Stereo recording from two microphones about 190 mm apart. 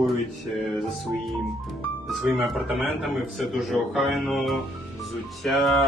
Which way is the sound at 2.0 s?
Centre (ahead or behind).